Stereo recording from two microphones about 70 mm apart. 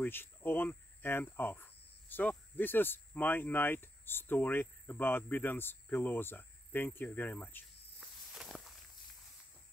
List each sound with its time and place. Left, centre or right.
0.0 s speech: left
8.0 s walk: centre